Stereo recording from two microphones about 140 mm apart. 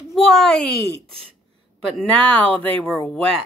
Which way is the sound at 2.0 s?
10° left (ahead or behind).